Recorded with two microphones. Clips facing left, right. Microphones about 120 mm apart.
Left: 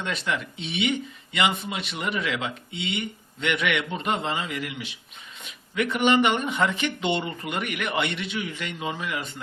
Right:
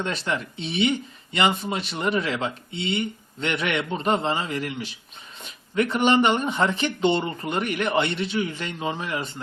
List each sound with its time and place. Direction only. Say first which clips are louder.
0.0 s speech: right 2 dB; 35° right (ahead or behind)